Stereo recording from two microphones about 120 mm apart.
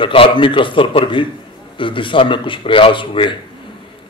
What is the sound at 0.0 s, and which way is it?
A man's voice, 45° left (ahead or behind).